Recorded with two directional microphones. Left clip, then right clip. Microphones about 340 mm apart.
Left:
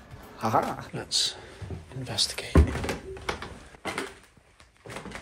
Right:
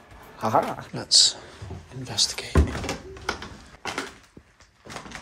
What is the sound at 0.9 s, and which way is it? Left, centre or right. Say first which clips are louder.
Speech: right 9 dB; centre.